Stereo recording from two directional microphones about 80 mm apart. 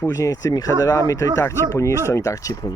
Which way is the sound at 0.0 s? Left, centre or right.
Left.